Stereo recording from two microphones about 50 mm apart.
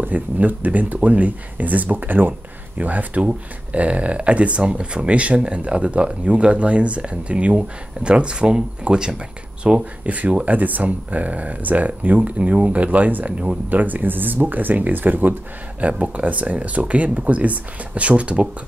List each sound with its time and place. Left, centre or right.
0.0 s speech: right; by 9.8 s centre
10.0 s speech: right